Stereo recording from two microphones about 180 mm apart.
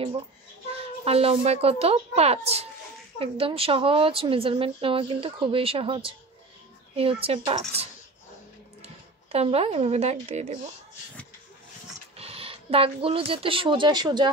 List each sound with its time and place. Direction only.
1.0 s a woman's voice: 35° right (ahead or behind)
8.8 s speech: 35° right (ahead or behind)
12.2 s speech: 30° right (ahead or behind)